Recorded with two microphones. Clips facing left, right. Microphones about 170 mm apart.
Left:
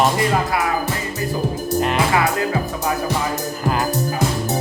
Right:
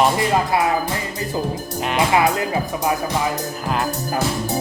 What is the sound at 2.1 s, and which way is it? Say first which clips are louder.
Speech: right 1 dB; 20° right (ahead or behind).